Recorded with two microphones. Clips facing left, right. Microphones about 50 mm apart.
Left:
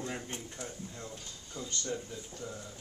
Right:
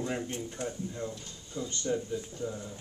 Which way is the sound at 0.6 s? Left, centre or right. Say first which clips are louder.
Right 9 dB; right.